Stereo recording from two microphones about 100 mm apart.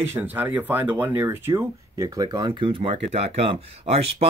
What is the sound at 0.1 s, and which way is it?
Speech, 20° right (ahead or behind).